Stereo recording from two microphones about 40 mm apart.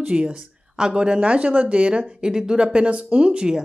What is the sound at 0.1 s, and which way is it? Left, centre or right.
Speech, right.